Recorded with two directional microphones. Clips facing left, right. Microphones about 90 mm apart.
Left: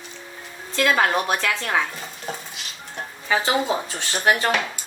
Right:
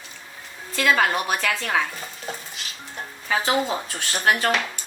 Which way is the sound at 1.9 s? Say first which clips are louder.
Left 1 dB; centre (ahead or behind).